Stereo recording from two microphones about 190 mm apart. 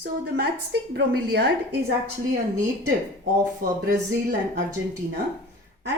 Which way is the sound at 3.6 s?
55° right (ahead or behind).